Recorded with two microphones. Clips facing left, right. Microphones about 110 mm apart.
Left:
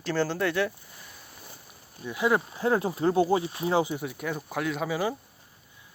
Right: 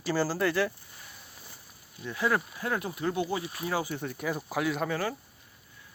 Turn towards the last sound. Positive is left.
turn(degrees=15)  # may be behind; listen again after turning